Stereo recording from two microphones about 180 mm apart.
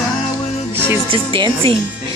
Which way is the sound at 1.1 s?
30° right (ahead or behind).